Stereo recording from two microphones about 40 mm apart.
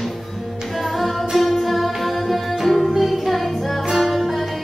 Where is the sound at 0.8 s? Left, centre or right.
Centre.